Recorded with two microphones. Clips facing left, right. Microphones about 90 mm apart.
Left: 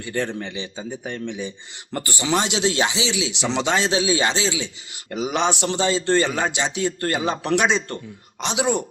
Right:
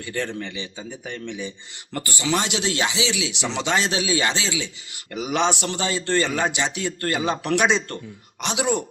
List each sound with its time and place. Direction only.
0.0 s speech: 20° left (ahead or behind)